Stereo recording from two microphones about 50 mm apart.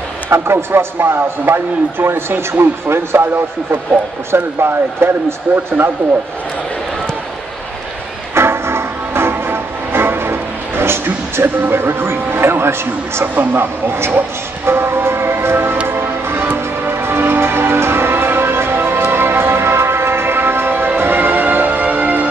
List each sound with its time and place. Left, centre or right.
0.3 s speech: right
4.3 s speech: right
5.5 s speech: right
8.4 s music: right
13.2 s speech: right
14.7 s music: right